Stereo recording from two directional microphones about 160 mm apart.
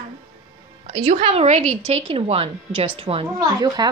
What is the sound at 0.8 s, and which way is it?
A woman's voice, 35° right (ahead or behind).